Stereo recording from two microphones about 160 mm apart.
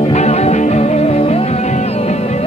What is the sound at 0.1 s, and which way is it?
Music, 45° left (ahead or behind).